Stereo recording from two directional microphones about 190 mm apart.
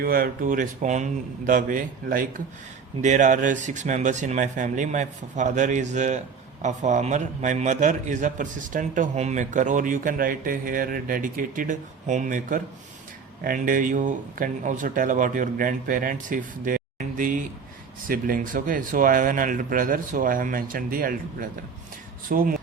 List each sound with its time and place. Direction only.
0.0 s a man's voice: 50° right (ahead or behind)
22.3 s a man's voice: 45° right (ahead or behind)